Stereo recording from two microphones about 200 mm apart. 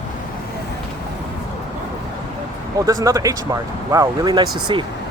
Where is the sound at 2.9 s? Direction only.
15° right (ahead or behind).